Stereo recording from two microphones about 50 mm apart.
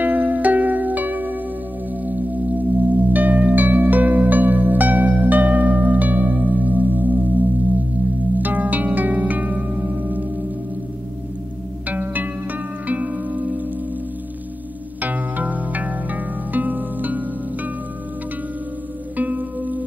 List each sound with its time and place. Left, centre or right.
0.0 s music: right
2.0 s singing bowl: right
8.4 s music: right
11.9 s music: right
15.0 s music: right
19.1 s music: right